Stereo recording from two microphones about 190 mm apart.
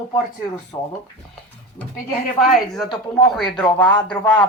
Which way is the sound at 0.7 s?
10° left (ahead or behind).